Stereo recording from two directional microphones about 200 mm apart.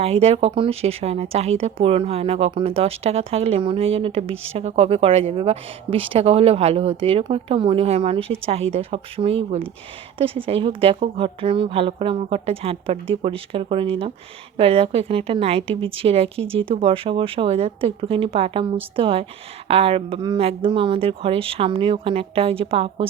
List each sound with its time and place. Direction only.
0.0 s speech: 30° right (ahead or behind)